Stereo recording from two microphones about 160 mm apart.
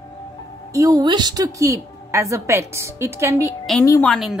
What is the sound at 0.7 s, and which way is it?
A woman's voice, 20° right (ahead or behind).